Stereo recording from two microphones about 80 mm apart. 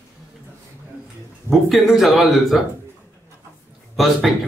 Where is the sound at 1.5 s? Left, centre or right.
Centre.